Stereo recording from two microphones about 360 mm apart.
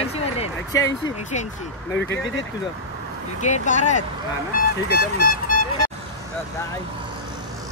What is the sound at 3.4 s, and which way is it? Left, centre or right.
Speech, centre.